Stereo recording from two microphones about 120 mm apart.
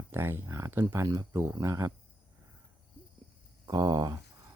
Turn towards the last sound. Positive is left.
turn(degrees=-30)  # may be behind; listen again after turning